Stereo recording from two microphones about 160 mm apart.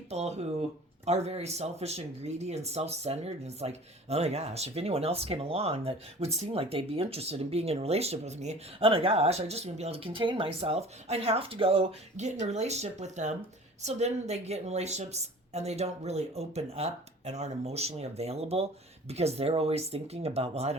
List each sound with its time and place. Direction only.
0.1 s speech: 45° right (ahead or behind)